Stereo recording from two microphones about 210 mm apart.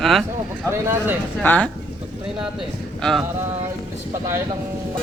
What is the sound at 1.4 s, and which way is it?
Speech, 5° left (ahead or behind).